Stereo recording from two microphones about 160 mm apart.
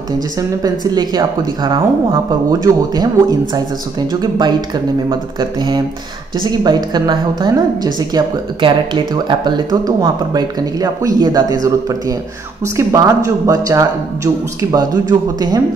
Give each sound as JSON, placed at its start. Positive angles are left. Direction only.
{"t": 0.4, "sound": "a woman's voice", "side_deg": -25}